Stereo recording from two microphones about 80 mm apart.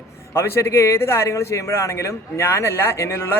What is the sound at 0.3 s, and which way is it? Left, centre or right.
A man's voice, left.